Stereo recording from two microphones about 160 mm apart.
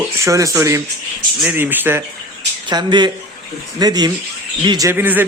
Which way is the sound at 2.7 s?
25° right (ahead or behind).